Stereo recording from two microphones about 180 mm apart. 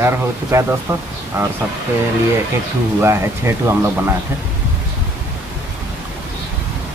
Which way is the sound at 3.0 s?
15° right (ahead or behind).